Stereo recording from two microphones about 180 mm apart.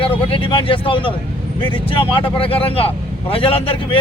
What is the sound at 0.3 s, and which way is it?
A man's voice, 30° left (ahead or behind).